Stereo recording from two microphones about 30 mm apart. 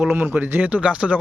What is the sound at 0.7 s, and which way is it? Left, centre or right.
Speech, right.